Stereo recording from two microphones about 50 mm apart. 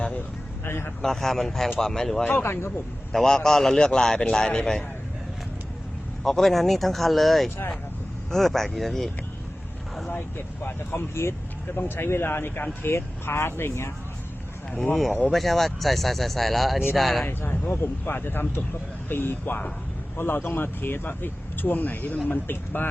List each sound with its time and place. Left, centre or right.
0.6 s speech: left
1.0 s a man's voice: centre
2.4 s speech: left
3.1 s a man's voice: centre
6.2 s speech: centre
10.1 s speech: left
11.1 s speech: left
11.8 s speech: left
15.3 s speech: centre
17.2 s speech: left